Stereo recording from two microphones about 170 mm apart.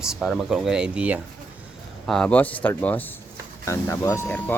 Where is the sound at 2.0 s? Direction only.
5° left (ahead or behind).